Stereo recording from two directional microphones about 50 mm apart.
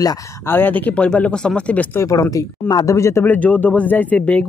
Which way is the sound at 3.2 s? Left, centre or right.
Left.